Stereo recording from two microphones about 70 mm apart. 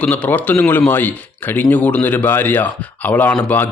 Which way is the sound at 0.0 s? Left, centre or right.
Centre.